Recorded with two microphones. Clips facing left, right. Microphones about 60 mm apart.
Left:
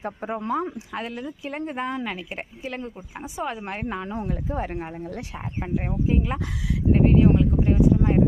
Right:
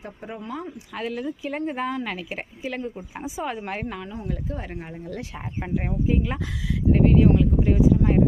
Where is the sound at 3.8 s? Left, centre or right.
Left.